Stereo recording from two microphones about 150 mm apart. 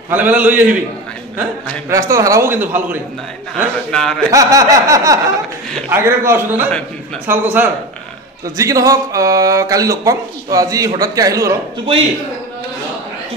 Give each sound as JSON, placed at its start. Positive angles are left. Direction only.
{"t": 0.1, "sound": "a man's voice", "side_deg": -10}
{"t": 3.9, "sound": "a man's voice", "side_deg": 5}
{"t": 4.3, "sound": "a man's voice", "side_deg": -20}